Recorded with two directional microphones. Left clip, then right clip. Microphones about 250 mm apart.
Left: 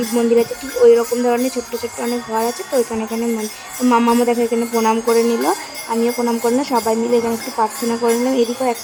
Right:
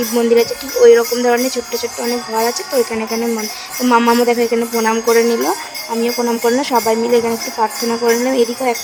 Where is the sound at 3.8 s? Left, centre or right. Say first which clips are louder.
Right 3 dB; centre.